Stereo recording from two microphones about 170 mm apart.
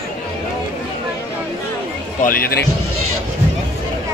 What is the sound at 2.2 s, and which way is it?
Speech, 60° left (ahead or behind).